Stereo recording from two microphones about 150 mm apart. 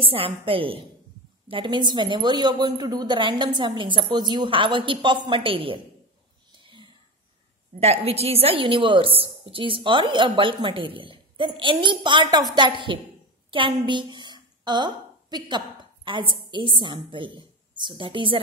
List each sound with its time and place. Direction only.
0.0 s a woman's voice: 35° right (ahead or behind)
6.5 s whispering: 30° right (ahead or behind)
7.8 s a woman's voice: 40° right (ahead or behind)